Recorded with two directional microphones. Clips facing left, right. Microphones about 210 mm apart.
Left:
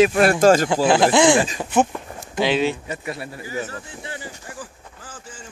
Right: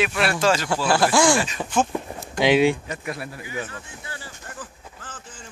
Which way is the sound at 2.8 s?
5° left (ahead or behind).